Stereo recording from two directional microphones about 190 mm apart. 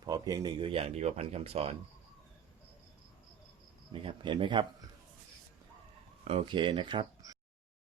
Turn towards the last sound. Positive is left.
turn(degrees=-25)  # may be behind; listen again after turning